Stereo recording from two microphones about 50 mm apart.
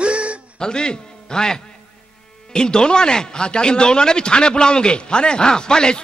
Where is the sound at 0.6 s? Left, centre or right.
Centre.